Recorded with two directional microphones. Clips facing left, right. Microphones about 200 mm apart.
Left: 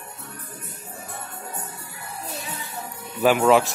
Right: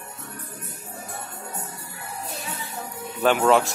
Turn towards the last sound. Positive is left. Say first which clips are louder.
# left 2 dB
turn(degrees=0)  # may be behind; listen again after turning